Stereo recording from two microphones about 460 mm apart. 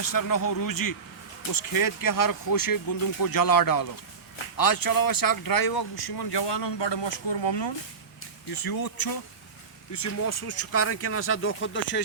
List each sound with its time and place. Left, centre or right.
0.0 s speech: left
8.5 s speech: left
9.9 s speech: left